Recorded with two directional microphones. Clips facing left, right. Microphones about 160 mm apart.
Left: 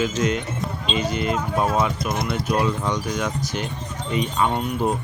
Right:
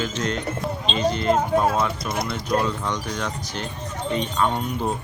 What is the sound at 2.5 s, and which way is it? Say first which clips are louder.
Speech: left 1 dB; 10° left (ahead or behind).